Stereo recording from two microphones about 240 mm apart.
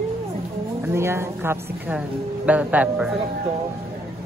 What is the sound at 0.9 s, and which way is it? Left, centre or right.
Speech, centre.